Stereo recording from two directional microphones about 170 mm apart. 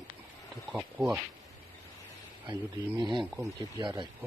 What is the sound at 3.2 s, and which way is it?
Speech, centre (ahead or behind).